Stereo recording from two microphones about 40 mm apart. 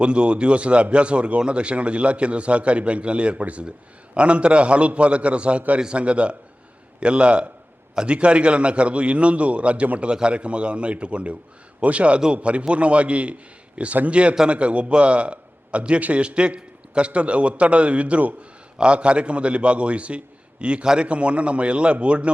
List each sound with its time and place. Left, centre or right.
0.0 s a man's voice: right
10.1 s a man's voice: right
18.8 s a man's voice: right